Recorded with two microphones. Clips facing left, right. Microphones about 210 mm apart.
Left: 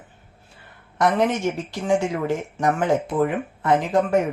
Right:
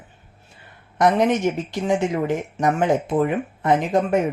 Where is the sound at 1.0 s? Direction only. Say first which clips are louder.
Right 2 dB; 20° right (ahead or behind).